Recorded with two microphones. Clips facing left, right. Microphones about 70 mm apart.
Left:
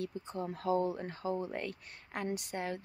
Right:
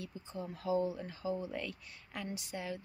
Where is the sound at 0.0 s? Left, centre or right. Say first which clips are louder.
Left 5 dB; left.